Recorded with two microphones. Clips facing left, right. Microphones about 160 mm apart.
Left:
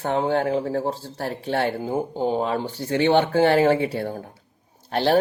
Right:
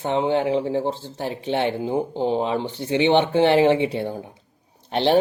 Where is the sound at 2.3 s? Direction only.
25° right (ahead or behind).